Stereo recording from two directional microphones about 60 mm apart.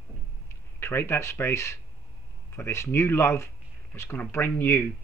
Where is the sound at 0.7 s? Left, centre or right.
Left.